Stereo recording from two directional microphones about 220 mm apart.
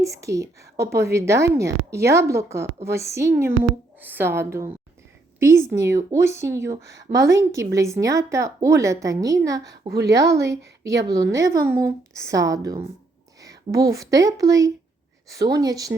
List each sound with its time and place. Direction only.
0.0 s a woman's voice: 15° right (ahead or behind)